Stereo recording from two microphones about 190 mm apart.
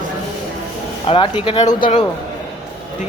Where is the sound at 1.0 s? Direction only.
30° left (ahead or behind).